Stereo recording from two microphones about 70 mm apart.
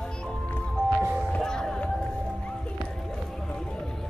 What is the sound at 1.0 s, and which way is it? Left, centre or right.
Music, centre.